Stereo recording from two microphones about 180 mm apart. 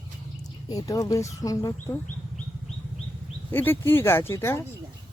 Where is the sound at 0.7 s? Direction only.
20° left (ahead or behind).